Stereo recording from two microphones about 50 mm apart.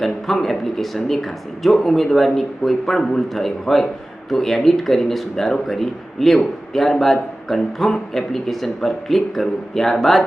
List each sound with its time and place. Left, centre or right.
0.0 s speech: centre